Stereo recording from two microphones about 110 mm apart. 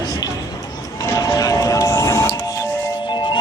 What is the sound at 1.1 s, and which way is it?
Music, 30° left (ahead or behind).